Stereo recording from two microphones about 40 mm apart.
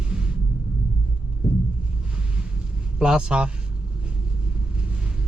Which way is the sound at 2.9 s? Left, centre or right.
Centre.